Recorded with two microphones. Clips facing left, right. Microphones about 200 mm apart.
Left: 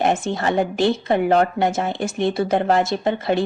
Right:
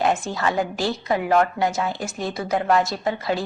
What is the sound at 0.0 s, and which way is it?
Speech, 25° left (ahead or behind).